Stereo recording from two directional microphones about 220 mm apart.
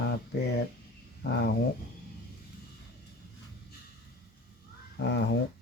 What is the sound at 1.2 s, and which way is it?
Speech, 45° left (ahead or behind).